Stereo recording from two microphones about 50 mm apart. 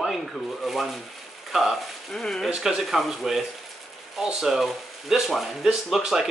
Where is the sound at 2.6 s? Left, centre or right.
Centre.